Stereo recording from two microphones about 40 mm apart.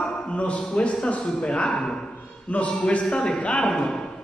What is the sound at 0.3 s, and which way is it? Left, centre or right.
Speech, left.